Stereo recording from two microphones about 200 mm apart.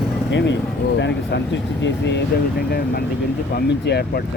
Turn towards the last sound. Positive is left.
turn(degrees=55)  # may be behind; listen again after turning